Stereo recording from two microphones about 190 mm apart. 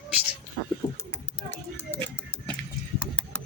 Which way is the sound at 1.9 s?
10° left (ahead or behind).